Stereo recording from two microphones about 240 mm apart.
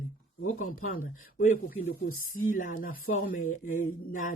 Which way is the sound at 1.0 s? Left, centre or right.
Left.